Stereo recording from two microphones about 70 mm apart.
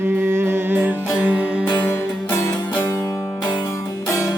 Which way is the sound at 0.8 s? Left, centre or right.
Centre.